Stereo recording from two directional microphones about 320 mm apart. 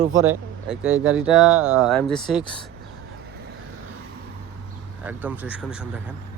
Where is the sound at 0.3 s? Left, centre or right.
Centre.